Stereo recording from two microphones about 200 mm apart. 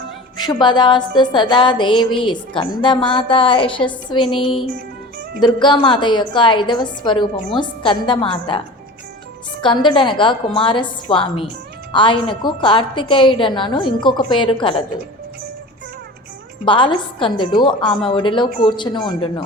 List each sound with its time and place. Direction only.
0.3 s music: 20° left (ahead or behind)
16.6 s music: 25° left (ahead or behind)